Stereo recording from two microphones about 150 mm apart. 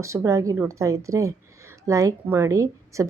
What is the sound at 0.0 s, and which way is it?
A woman's voice, 20° right (ahead or behind).